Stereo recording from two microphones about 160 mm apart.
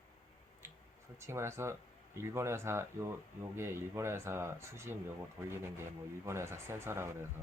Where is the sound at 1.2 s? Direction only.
15° right (ahead or behind).